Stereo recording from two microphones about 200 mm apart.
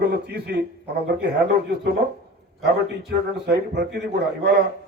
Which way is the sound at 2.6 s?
55° right (ahead or behind).